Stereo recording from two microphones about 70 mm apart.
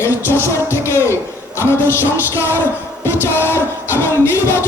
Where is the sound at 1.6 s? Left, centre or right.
Left.